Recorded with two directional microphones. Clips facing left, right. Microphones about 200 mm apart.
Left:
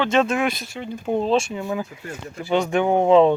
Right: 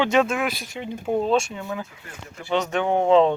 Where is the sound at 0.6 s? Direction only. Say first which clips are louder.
Left 1 dB; 20° right (ahead or behind).